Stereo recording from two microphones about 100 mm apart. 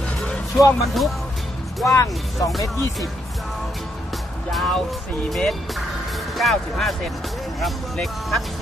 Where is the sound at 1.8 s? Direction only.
30° left (ahead or behind).